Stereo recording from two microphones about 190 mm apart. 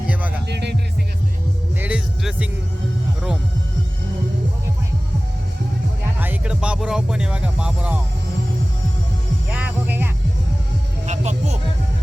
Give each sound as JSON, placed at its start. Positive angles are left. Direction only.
{"t": 0.1, "sound": "music", "side_deg": -10}
{"t": 0.4, "sound": "music", "side_deg": -60}
{"t": 1.8, "sound": "music", "side_deg": -5}
{"t": 6.1, "sound": "music", "side_deg": -10}
{"t": 9.5, "sound": "hum", "side_deg": -10}
{"t": 11.0, "sound": "music", "side_deg": -40}